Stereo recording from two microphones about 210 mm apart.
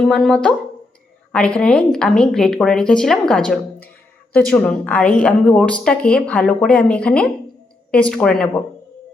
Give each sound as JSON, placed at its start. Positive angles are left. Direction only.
{"t": 0.0, "sound": "a woman's voice", "side_deg": 0}